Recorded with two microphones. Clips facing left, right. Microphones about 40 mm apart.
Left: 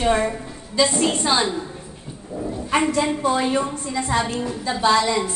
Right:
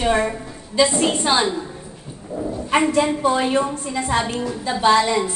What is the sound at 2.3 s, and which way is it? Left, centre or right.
Dog, centre.